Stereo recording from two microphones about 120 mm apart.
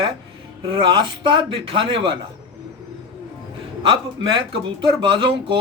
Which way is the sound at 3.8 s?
45° right (ahead or behind).